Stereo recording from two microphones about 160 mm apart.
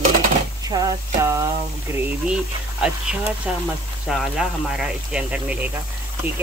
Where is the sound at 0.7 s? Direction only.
25° right (ahead or behind).